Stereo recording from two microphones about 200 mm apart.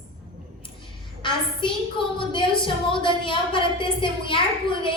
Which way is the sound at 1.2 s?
25° left (ahead or behind).